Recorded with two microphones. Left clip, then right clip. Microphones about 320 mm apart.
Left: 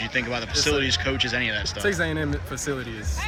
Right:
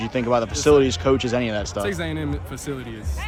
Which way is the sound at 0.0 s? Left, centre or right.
Centre.